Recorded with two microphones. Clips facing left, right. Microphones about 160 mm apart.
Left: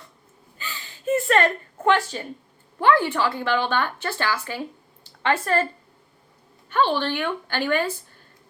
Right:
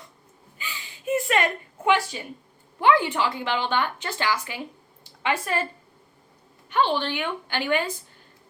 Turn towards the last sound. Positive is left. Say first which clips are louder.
# left 2 dB
turn(degrees=-15)  # may be behind; listen again after turning